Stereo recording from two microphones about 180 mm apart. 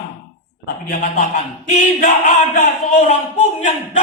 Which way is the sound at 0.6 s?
50° left (ahead or behind).